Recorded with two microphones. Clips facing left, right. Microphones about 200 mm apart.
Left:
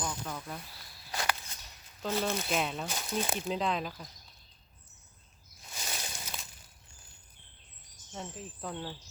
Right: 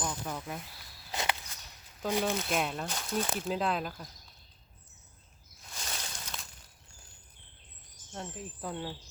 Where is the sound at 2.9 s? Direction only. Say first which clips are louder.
Right 1 dB; 10° left (ahead or behind).